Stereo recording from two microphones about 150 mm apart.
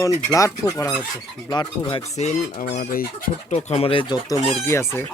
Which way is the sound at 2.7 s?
75° left (ahead or behind).